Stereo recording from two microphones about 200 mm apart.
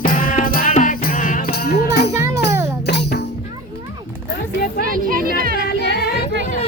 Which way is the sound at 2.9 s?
55° left (ahead or behind).